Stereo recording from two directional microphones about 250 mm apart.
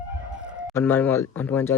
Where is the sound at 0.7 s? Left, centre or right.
Centre.